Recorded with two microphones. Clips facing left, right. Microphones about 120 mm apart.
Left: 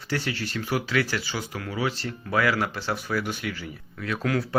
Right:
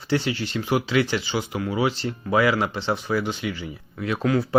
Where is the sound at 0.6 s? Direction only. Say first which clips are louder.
Right 4 dB; 20° right (ahead or behind).